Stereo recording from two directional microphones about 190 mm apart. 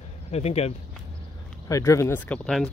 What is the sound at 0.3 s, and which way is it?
Speech, 35° left (ahead or behind).